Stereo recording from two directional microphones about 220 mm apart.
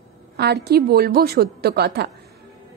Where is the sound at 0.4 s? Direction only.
50° right (ahead or behind).